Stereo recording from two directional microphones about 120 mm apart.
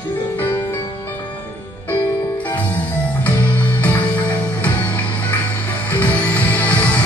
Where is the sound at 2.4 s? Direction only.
15° left (ahead or behind).